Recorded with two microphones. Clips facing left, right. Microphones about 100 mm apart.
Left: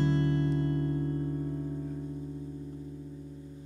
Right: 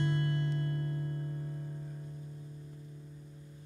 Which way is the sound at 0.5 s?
25° left (ahead or behind).